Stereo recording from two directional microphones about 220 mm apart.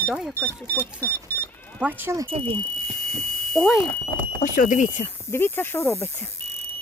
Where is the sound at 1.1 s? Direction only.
10° left (ahead or behind).